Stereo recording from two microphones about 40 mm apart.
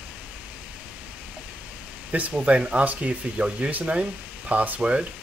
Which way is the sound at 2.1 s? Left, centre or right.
Right.